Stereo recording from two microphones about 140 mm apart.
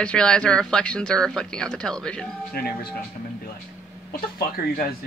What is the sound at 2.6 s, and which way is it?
Speech, 90° left.